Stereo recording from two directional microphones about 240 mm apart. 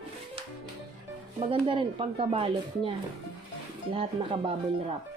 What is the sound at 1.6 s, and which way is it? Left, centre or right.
Speech, right.